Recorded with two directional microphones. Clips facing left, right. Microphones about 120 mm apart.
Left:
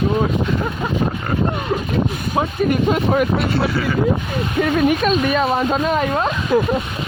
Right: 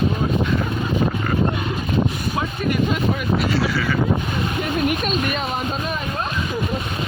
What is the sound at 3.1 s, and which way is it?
Vehicle, 55° left (ahead or behind).